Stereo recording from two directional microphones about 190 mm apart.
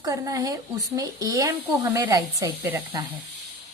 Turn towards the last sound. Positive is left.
turn(degrees=-10)  # may be behind; listen again after turning